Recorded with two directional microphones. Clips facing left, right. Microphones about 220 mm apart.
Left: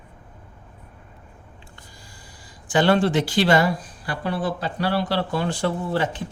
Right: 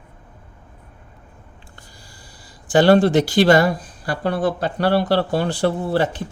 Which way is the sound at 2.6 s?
40° right (ahead or behind).